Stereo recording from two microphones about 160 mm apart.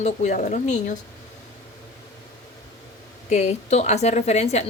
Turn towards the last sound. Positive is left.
turn(degrees=45)  # may be behind; listen again after turning